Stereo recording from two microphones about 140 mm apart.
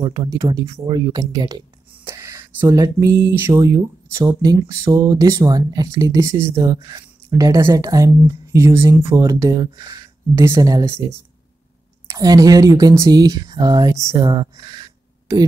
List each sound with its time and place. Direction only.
0.0 s speech: 30° right (ahead or behind)